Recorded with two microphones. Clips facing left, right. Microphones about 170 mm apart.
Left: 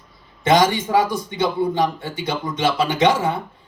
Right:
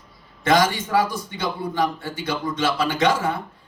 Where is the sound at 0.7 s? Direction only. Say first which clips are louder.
Left 3 dB; 20° left (ahead or behind).